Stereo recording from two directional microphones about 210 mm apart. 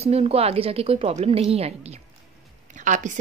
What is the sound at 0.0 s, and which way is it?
A woman's voice, 30° right (ahead or behind).